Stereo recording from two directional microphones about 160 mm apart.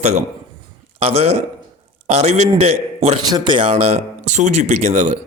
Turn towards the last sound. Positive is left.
turn(degrees=-45)  # may be behind; listen again after turning